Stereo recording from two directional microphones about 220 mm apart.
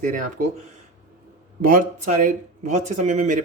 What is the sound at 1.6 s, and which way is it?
A man's voice, 40° right (ahead or behind).